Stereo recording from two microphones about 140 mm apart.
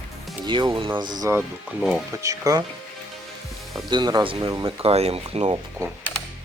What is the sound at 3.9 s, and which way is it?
Speech, 30° right (ahead or behind).